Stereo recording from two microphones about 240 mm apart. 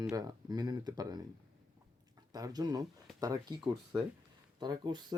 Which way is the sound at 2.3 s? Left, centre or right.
Centre.